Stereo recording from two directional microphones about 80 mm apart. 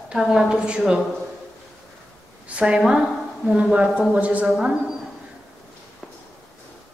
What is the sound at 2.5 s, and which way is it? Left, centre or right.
A woman's voice, centre.